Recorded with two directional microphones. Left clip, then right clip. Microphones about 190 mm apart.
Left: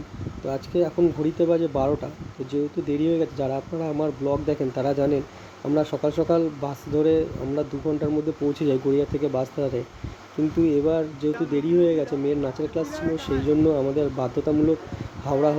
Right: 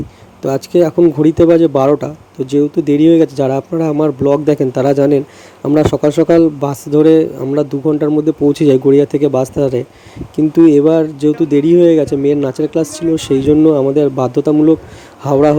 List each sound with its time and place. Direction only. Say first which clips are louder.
0.4 s speech: right 12 dB; 50° right (ahead or behind)